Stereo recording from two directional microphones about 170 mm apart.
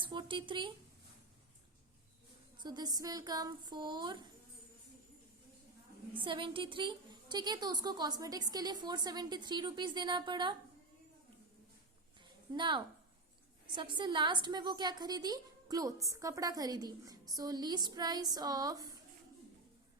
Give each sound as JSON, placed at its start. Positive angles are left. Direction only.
{"t": 0.0, "sound": "a woman's voice", "side_deg": -30}
{"t": 2.6, "sound": "a woman's voice", "side_deg": -25}
{"t": 6.1, "sound": "a woman's voice", "side_deg": -30}
{"t": 12.5, "sound": "a woman's voice", "side_deg": -25}